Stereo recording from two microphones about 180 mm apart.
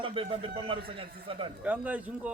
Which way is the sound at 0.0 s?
30° right (ahead or behind).